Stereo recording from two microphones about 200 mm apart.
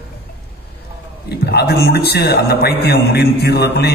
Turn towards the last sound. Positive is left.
turn(degrees=55)  # may be behind; listen again after turning